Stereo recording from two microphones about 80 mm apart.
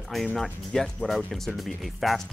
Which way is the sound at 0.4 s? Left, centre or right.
Centre.